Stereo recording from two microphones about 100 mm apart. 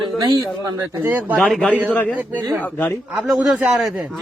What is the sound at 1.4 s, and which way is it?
Speech, centre (ahead or behind).